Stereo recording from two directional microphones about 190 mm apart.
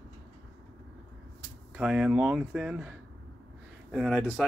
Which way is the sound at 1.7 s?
5° right (ahead or behind).